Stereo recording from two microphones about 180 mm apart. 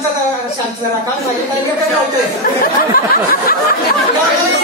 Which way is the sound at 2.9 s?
55° left (ahead or behind).